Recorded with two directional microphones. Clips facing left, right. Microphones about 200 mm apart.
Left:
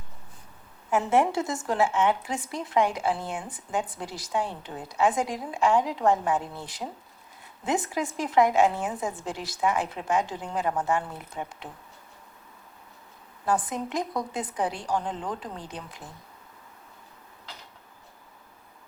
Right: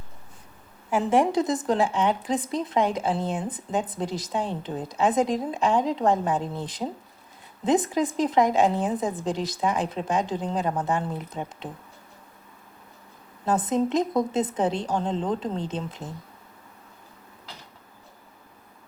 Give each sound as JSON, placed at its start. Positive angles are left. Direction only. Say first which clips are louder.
{"t": 0.9, "sound": "a woman's voice", "louder": "right 2 dB", "side_deg": -15}
{"t": 13.4, "sound": "a woman's voice", "louder": "right 4 dB", "side_deg": -20}